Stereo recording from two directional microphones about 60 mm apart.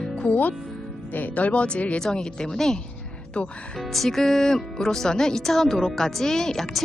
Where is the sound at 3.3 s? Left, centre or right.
Left.